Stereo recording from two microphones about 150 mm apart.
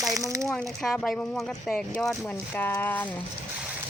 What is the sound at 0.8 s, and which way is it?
Speech, 5° left (ahead or behind).